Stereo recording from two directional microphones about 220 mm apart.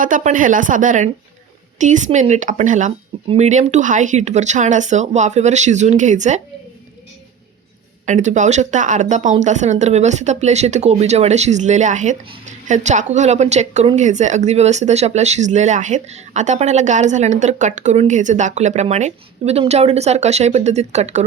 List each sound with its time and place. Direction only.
0.0 s speech: 35° right (ahead or behind)
8.0 s speech: 35° right (ahead or behind)